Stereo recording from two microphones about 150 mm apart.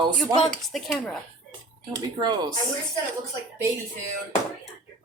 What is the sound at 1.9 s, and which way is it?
Speech, 25° right (ahead or behind).